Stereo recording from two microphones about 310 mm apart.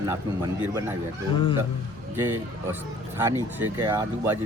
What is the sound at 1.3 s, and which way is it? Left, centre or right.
Speech, centre.